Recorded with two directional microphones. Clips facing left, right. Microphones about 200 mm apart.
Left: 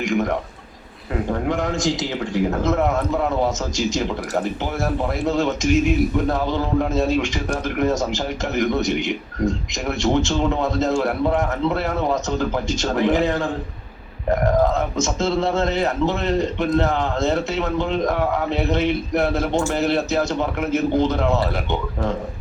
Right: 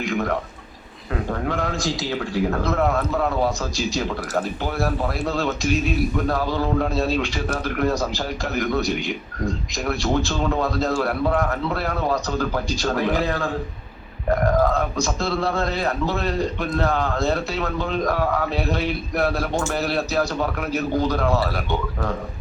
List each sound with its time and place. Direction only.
0.1 s a man's voice: 20° left (ahead or behind)
1.5 s a man's voice: 20° left (ahead or behind)